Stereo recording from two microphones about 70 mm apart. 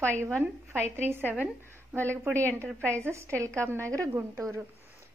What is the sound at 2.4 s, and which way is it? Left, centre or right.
Speech, left.